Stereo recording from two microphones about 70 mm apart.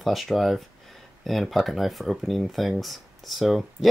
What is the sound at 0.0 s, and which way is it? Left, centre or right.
Speech, centre.